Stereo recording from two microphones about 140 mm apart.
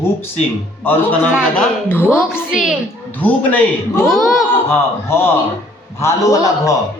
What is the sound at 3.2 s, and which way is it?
Speech, 10° left (ahead or behind).